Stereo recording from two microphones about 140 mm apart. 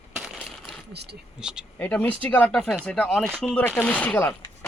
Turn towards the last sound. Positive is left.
turn(degrees=10)  # may be behind; listen again after turning